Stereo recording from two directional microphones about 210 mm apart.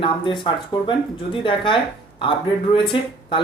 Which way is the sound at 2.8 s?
25° left (ahead or behind).